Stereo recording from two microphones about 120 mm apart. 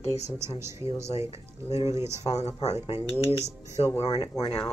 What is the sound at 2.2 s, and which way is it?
Speech, 70° left (ahead or behind).